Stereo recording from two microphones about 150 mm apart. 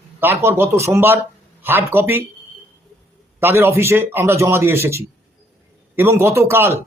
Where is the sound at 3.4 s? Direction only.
15° right (ahead or behind).